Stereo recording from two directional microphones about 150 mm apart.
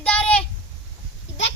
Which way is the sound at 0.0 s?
10° left (ahead or behind).